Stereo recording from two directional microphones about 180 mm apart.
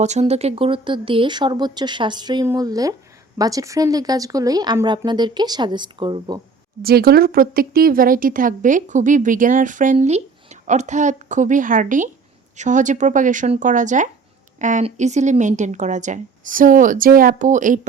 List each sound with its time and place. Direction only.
0.0 s speech: 40° right (ahead or behind)
6.8 s a woman's voice: 60° right (ahead or behind)